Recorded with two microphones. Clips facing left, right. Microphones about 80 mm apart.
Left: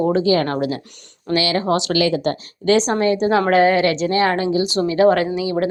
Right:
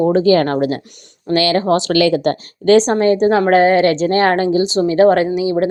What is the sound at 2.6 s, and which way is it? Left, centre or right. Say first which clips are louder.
Speech: right 5 dB; right.